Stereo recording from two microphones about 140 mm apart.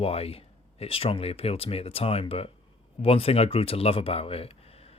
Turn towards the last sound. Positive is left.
turn(degrees=45)  # may be behind; listen again after turning